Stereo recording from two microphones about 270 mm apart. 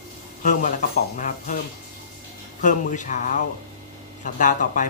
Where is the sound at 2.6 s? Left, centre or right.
Left.